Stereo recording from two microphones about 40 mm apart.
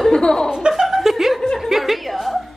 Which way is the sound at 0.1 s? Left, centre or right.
Centre.